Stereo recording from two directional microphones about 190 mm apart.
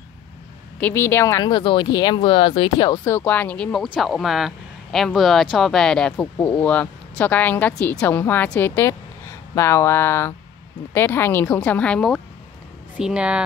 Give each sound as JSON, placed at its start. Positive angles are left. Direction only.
{"t": 0.7, "sound": "speech", "side_deg": 10}